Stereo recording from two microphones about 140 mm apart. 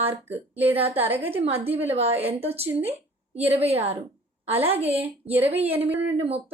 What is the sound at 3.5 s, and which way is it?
Speech, 45° right (ahead or behind).